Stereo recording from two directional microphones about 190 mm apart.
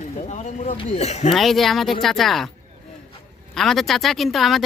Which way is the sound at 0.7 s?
35° left (ahead or behind).